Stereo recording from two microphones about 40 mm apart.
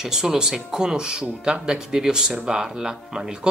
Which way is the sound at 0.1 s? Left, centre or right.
Centre.